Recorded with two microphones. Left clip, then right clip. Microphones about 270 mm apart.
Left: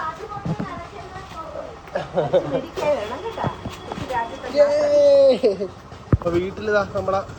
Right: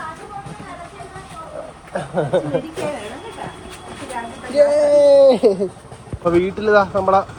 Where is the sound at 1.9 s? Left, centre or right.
Right.